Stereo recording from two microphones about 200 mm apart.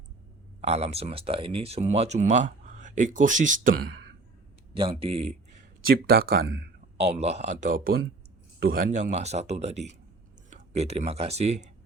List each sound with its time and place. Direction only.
0.6 s speech: 30° right (ahead or behind)
4.7 s speech: 25° right (ahead or behind)
5.8 s speech: 50° right (ahead or behind)
7.0 s speech: 35° right (ahead or behind)